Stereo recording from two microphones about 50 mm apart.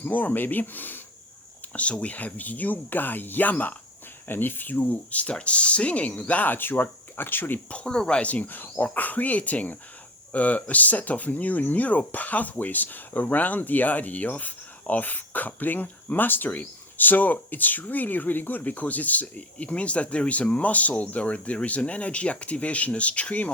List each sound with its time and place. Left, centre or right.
0.0 s speech: left
1.7 s speech: left
4.3 s speech: left
4.8 s speech: left
7.7 s speech: centre
8.3 s speech: left